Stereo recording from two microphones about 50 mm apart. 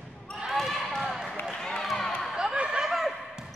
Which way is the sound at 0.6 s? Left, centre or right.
Centre.